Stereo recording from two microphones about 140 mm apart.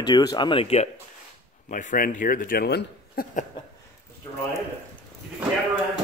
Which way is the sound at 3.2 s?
90° left.